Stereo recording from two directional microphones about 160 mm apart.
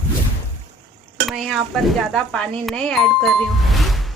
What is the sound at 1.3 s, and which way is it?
Speech, centre (ahead or behind).